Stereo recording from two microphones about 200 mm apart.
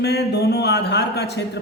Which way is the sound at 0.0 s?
55° left (ahead or behind).